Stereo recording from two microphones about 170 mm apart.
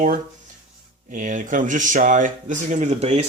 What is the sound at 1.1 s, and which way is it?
A man's voice, 50° right (ahead or behind).